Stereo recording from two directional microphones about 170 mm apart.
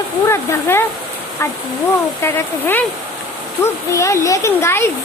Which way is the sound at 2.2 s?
15° left (ahead or behind).